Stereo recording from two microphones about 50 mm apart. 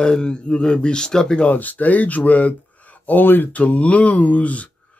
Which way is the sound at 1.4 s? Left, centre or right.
Left.